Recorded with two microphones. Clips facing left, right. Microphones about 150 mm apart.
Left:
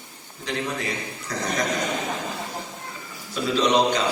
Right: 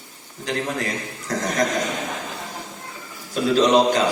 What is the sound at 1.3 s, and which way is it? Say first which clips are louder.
Speech: right 4 dB; 45° right (ahead or behind).